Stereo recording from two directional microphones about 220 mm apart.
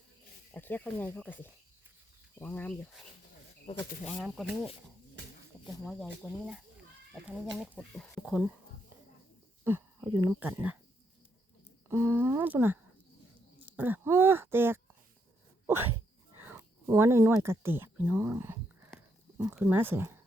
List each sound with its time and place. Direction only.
0.5 s speech: 10° left (ahead or behind)
3.7 s speech: 30° left (ahead or behind)
4.0 s speech: centre (ahead or behind)
9.6 s a sound: 10° right (ahead or behind)
10.2 s speech: 10° right (ahead or behind)
11.9 s speech: 10° right (ahead or behind)
15.6 s dog: 10° right (ahead or behind)
16.5 s speech: 10° right (ahead or behind)